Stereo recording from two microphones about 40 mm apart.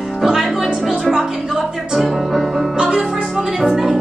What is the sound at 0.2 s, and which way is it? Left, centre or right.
Music, centre.